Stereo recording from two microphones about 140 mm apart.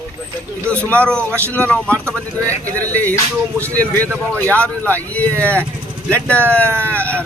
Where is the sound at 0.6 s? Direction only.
15° right (ahead or behind).